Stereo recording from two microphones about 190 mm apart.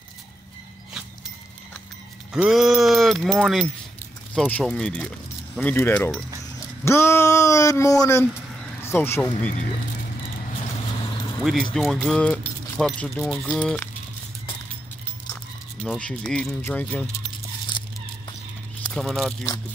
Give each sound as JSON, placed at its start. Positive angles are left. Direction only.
{"t": 2.3, "sound": "speech", "side_deg": 0}
{"t": 11.4, "sound": "speech", "side_deg": 0}
{"t": 15.8, "sound": "speech", "side_deg": 5}
{"t": 18.9, "sound": "speech", "side_deg": 0}